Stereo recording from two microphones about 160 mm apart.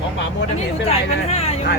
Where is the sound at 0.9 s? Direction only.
40° left (ahead or behind).